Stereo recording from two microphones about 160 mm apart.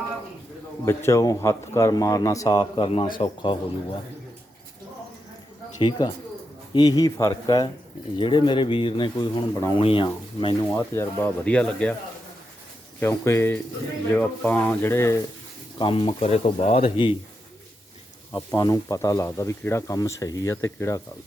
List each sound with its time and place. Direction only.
0.9 s speech: 15° left (ahead or behind)
5.8 s speech: 30° left (ahead or behind)
10.7 s speech: 15° left (ahead or behind)
13.0 s speech: 15° left (ahead or behind)
15.8 s speech: 35° left (ahead or behind)
18.3 s speech: 25° left (ahead or behind)